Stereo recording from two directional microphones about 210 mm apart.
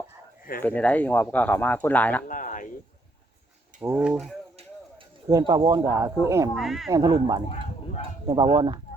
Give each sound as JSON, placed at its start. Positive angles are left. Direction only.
{"t": 0.6, "sound": "speech", "side_deg": 5}
{"t": 2.2, "sound": "speech", "side_deg": 40}
{"t": 3.8, "sound": "speech", "side_deg": -5}
{"t": 5.3, "sound": "speech", "side_deg": -20}
{"t": 6.5, "sound": "speech", "side_deg": 0}
{"t": 6.9, "sound": "speech", "side_deg": -20}
{"t": 8.5, "sound": "speech", "side_deg": -20}